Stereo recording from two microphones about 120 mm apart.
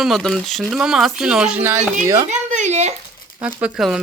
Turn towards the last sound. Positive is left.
turn(degrees=-5)  # may be behind; listen again after turning